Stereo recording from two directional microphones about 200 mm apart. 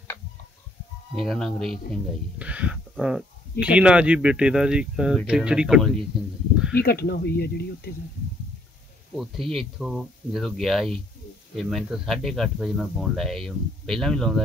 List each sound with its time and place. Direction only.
1.1 s speech: centre (ahead or behind)
6.7 s speech: 50° left (ahead or behind)
9.1 s speech: centre (ahead or behind)